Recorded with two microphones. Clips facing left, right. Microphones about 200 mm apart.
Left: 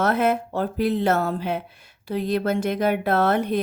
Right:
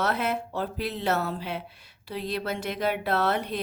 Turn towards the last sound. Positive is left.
turn(degrees=50)  # may be behind; listen again after turning